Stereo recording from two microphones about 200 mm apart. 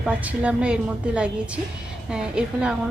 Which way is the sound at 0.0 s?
5° right (ahead or behind).